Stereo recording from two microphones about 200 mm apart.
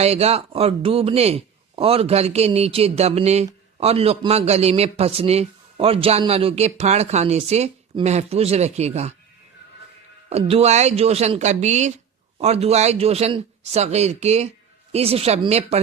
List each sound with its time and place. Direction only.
0.0 s speech: 30° right (ahead or behind)
10.2 s speech: 30° right (ahead or behind)